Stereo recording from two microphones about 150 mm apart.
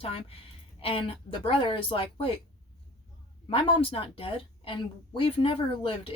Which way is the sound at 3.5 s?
35° left (ahead or behind).